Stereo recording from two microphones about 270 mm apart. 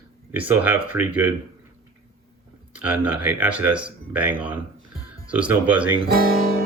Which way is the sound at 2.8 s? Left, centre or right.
Centre.